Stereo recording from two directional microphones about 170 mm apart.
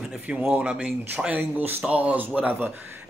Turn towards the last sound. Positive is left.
turn(degrees=-10)  # may be behind; listen again after turning